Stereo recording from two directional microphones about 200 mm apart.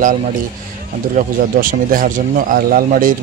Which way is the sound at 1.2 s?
45° right (ahead or behind).